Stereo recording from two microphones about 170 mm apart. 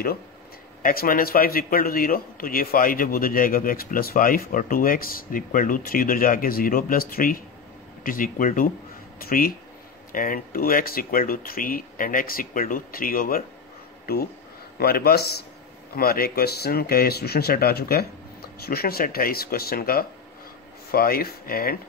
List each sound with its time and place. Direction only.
0.8 s a man's voice: 55° left (ahead or behind)